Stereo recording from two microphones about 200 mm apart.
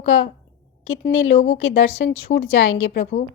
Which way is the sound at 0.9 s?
75° left (ahead or behind).